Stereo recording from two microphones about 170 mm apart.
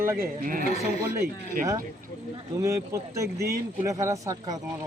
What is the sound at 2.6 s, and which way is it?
Speech, 20° right (ahead or behind).